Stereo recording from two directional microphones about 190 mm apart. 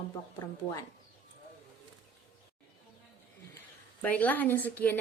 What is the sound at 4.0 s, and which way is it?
Speech, 10° left (ahead or behind).